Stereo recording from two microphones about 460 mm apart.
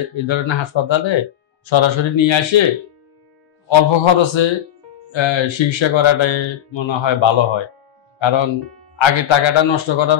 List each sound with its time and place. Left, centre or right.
0.1 s speech: left
3.6 s speech: left